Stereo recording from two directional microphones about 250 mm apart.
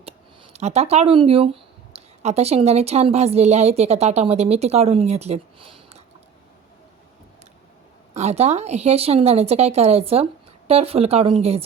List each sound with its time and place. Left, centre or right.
0.0 s a sound: right
1.9 s a woman's voice: right
8.1 s a woman's voice: right